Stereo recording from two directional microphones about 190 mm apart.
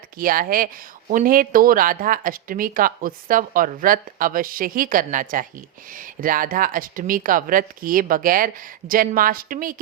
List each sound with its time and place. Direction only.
0.2 s speech: 50° right (ahead or behind)